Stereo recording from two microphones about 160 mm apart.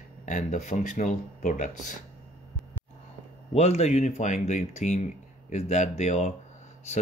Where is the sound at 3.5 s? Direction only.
40° left (ahead or behind).